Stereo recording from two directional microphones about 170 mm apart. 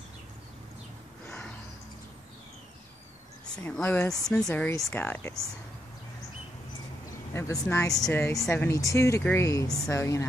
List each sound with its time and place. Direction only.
3.5 s speech: 5° left (ahead or behind)
7.7 s speech: 10° left (ahead or behind)